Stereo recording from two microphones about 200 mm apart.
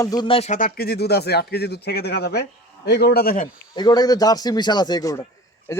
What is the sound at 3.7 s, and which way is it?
A man's voice, 20° left (ahead or behind).